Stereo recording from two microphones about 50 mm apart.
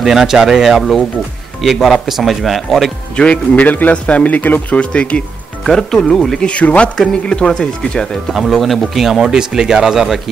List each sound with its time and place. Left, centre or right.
0.0 s speech: centre
3.2 s speech: left
5.6 s speech: centre
6.4 s speech: left
8.3 s speech: centre